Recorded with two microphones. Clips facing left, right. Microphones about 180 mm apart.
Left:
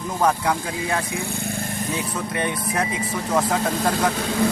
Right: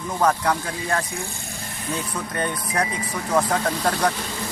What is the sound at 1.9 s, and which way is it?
Speech, 10° left (ahead or behind).